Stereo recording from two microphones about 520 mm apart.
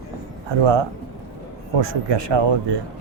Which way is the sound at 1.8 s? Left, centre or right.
Right.